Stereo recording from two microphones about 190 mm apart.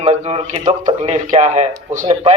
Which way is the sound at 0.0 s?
35° right (ahead or behind).